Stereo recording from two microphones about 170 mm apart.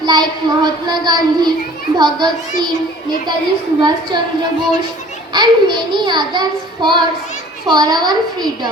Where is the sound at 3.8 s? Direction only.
25° right (ahead or behind).